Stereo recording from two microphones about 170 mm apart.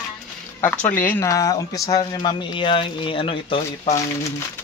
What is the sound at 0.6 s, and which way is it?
Speech, 10° left (ahead or behind).